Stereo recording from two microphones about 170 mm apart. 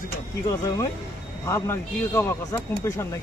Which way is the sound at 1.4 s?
15° left (ahead or behind).